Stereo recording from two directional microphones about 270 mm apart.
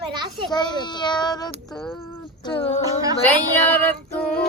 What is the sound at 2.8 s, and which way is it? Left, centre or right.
Speech, centre.